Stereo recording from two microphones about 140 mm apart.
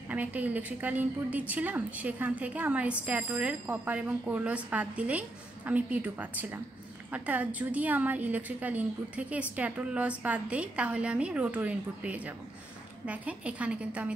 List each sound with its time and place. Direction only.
0.1 s a woman's voice: 10° right (ahead or behind)